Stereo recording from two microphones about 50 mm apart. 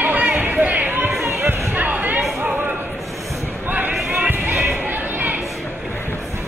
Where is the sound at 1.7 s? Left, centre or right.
Right.